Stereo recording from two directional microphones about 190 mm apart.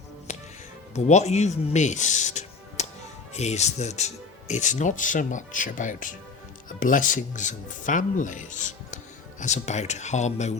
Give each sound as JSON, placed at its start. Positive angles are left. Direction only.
{"t": 0.3, "sound": "music", "side_deg": 35}
{"t": 0.9, "sound": "speech", "side_deg": 35}